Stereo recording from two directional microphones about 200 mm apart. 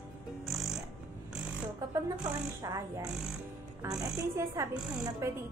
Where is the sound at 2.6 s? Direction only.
15° right (ahead or behind).